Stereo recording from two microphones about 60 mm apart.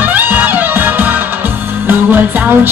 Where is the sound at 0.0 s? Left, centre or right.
Right.